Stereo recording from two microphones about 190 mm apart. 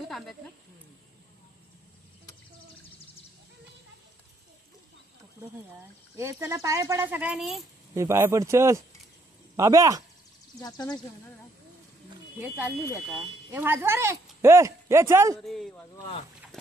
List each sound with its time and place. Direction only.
6.1 s speech: 15° right (ahead or behind)
7.9 s speech: 15° right (ahead or behind)
10.6 s speech: 20° left (ahead or behind)
12.4 s speech: 10° right (ahead or behind)
15.3 s speech: centre (ahead or behind)